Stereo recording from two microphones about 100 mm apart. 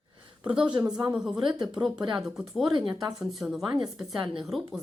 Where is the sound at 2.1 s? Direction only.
5° right (ahead or behind).